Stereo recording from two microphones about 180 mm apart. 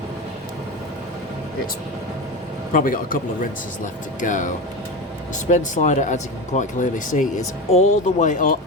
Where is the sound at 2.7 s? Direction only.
50° left (ahead or behind).